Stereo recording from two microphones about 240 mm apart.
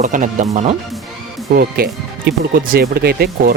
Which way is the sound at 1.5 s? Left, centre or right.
Right.